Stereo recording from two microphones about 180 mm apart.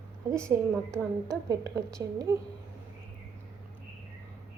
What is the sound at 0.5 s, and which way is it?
A woman's voice, 10° right (ahead or behind).